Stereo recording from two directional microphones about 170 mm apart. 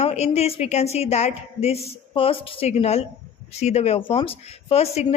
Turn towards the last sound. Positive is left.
turn(degrees=35)  # may be behind; listen again after turning